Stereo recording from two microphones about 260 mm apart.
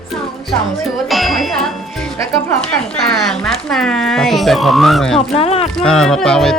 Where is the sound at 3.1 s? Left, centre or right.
Centre.